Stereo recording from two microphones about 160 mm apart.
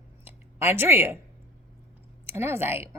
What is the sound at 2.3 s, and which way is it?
Speech, 15° right (ahead or behind).